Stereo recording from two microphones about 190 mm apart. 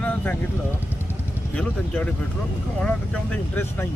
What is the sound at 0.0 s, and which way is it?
Vehicle, 10° left (ahead or behind).